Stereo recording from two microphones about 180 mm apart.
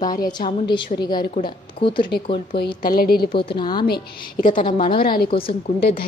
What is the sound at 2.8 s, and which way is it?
Speech, 55° left (ahead or behind).